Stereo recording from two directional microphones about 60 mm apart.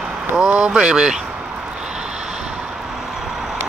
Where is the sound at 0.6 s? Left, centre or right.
Centre.